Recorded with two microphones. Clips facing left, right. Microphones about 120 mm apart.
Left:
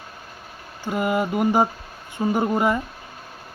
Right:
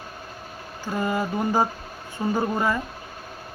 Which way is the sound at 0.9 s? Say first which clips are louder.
Left 3 dB; 15° left (ahead or behind).